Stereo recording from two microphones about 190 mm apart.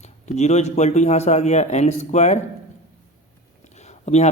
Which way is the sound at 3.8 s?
35° left (ahead or behind).